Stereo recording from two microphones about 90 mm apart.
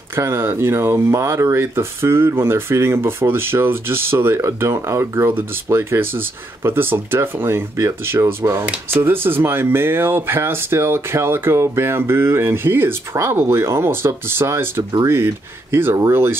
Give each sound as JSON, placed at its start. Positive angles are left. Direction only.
{"t": 0.1, "sound": "speech", "side_deg": -30}